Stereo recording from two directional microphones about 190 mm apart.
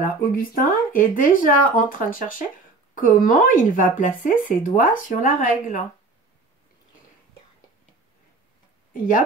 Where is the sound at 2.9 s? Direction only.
45° left (ahead or behind).